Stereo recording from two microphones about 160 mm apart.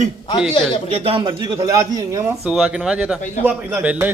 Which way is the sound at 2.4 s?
5° right (ahead or behind).